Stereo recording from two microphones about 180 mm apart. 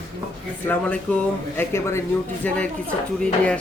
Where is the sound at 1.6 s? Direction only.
15° left (ahead or behind).